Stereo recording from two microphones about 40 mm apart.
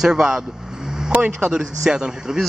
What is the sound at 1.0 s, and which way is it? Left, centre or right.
Speech, right.